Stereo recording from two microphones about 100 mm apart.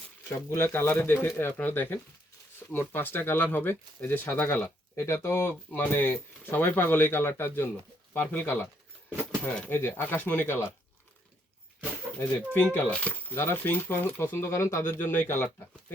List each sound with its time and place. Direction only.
0.3 s speech: 30° left (ahead or behind)
12.7 s speech: 15° left (ahead or behind)